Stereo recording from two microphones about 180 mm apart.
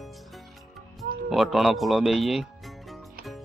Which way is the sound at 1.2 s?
Centre (ahead or behind).